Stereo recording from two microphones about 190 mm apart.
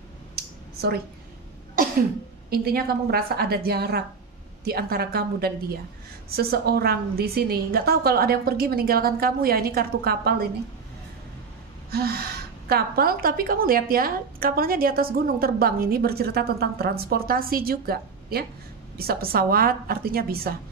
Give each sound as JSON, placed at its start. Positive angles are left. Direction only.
{"t": 2.5, "sound": "a woman's voice", "side_deg": -50}
{"t": 11.9, "sound": "a woman's voice", "side_deg": -55}